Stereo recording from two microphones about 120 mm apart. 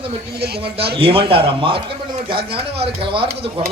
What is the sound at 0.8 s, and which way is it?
A man's voice, 50° right (ahead or behind).